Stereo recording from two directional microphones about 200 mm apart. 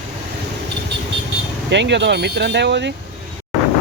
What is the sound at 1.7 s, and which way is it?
Speech, 60° right (ahead or behind).